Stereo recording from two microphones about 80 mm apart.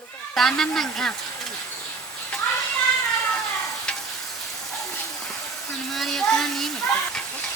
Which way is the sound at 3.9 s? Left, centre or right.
Centre.